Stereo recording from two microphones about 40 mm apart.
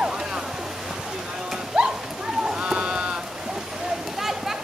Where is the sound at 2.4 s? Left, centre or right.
Right.